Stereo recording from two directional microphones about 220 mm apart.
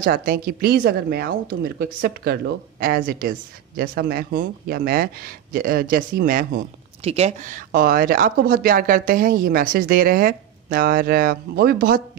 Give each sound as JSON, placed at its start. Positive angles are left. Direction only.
{"t": 0.0, "sound": "speech", "side_deg": -40}
{"t": 7.0, "sound": "speech", "side_deg": -30}